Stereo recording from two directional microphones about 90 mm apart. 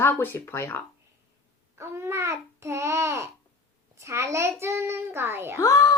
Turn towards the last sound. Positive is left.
turn(degrees=35)  # may be behind; listen again after turning